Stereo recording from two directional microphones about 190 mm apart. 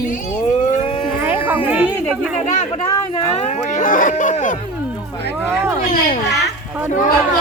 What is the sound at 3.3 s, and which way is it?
Speech, 45° left (ahead or behind).